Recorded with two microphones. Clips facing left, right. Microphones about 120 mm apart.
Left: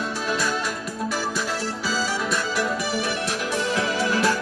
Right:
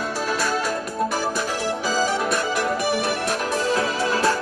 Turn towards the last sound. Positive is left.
turn(degrees=-35)  # may be behind; listen again after turning